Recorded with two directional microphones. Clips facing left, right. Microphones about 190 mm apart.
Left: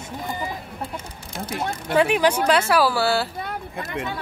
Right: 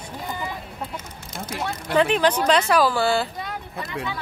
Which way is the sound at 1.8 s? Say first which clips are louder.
Even; 10° left (ahead or behind).